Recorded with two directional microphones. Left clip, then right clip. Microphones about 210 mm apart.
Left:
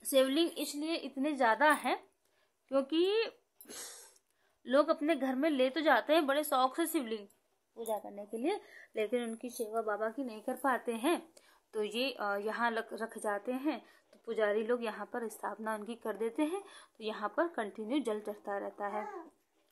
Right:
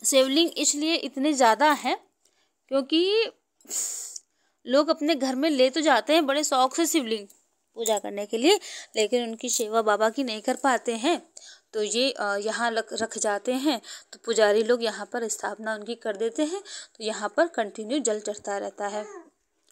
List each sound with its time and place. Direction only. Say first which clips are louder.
0.0 s a woman's voice: right 8 dB; 20° right (ahead or behind)
3.6 s a sound: right 15 dB; 10° right (ahead or behind)
4.6 s a woman's voice: right 7 dB; 20° right (ahead or behind)
7.7 s speech: right 12 dB; 45° right (ahead or behind)
8.9 s a woman's voice: right 10 dB; 20° right (ahead or behind)
9.5 s a woman's voice: right 13 dB; 35° right (ahead or behind)